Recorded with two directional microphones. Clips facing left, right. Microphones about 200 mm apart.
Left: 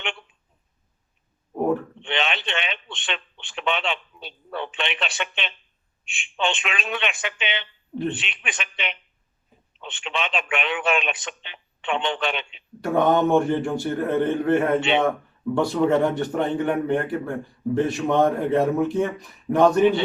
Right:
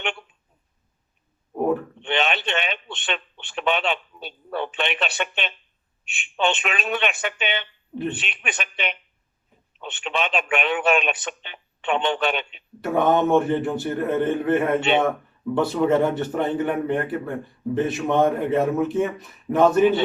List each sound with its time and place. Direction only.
1.5 s a sound: centre (ahead or behind)
2.1 s a man's voice: 50° right (ahead or behind)
6.7 s a man's voice: 55° right (ahead or behind)
12.8 s a man's voice: 5° right (ahead or behind)